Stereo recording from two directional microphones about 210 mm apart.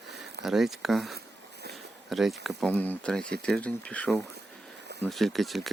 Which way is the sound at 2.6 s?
10° left (ahead or behind).